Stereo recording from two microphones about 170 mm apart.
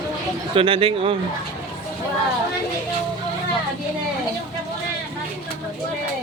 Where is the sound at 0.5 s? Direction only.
30° right (ahead or behind).